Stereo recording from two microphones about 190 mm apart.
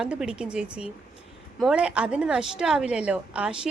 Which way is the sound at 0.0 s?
5° right (ahead or behind).